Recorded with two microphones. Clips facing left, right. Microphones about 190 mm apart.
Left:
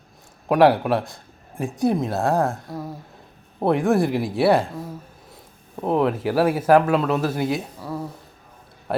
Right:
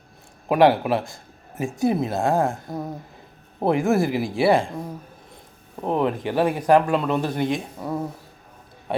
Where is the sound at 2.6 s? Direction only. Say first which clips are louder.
Right 2 dB; 20° right (ahead or behind).